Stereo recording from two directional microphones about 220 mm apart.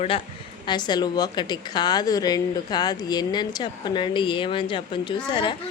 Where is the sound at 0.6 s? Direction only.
20° left (ahead or behind).